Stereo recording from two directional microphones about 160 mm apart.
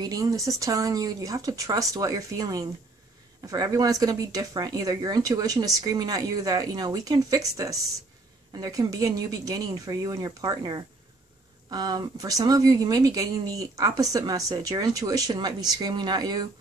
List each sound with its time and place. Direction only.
0.0 s speech: 20° right (ahead or behind)